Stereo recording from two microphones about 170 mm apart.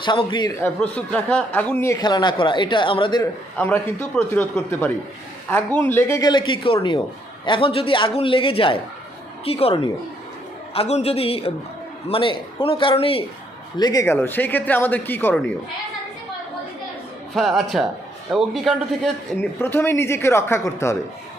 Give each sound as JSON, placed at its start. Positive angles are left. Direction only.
{"t": 0.0, "sound": "speech", "side_deg": 30}
{"t": 0.6, "sound": "speech", "side_deg": 10}
{"t": 3.6, "sound": "a man's voice", "side_deg": 10}
{"t": 13.7, "sound": "speech", "side_deg": 25}
{"t": 17.3, "sound": "a man's voice", "side_deg": 0}
{"t": 19.4, "sound": "speech", "side_deg": 15}